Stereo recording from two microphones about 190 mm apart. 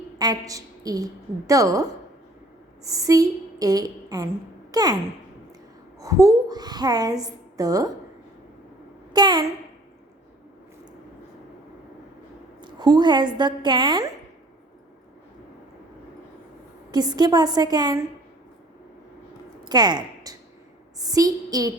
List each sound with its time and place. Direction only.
0.2 s a woman's voice: 20° right (ahead or behind)
2.8 s a woman's voice: 15° right (ahead or behind)
4.7 s a sound: 20° right (ahead or behind)
6.0 s a woman's voice: 15° right (ahead or behind)
9.1 s a child's voice: 20° right (ahead or behind)
12.6 s a woman's voice: 20° right (ahead or behind)
16.9 s a woman's voice: 20° right (ahead or behind)
19.6 s a woman's voice: 20° right (ahead or behind)